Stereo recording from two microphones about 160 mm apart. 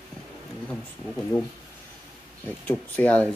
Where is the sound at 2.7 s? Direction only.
10° left (ahead or behind).